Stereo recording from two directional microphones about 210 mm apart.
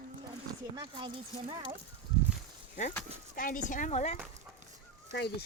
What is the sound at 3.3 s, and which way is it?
Speech, 40° left (ahead or behind).